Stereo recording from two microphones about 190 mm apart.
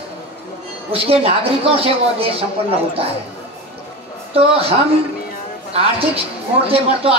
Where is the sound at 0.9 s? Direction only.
30° right (ahead or behind).